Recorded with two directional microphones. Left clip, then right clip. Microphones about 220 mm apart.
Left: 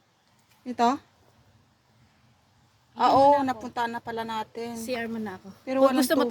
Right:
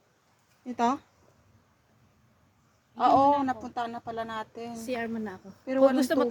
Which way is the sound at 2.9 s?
20° left (ahead or behind).